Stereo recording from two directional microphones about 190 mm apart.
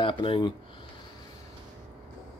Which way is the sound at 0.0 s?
25° left (ahead or behind).